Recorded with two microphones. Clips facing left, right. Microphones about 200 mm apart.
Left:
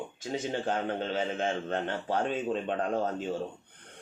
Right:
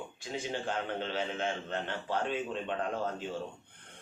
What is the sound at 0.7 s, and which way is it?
A man's voice, 45° left (ahead or behind).